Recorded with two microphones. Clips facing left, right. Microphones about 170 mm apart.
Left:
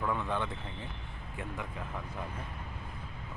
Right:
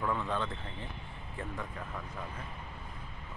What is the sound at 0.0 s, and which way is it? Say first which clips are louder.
Speech: even; 10° left (ahead or behind).